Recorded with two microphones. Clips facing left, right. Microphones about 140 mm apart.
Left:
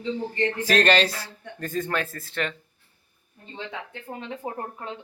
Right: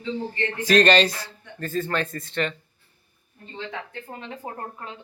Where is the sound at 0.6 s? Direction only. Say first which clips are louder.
Right 4 dB; 5° left (ahead or behind).